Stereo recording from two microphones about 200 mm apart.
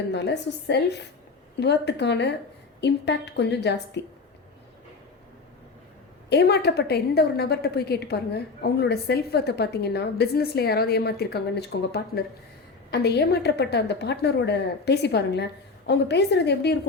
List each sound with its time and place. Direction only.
0.1 s a woman's voice: 60° left (ahead or behind)
6.3 s a woman's voice: 55° left (ahead or behind)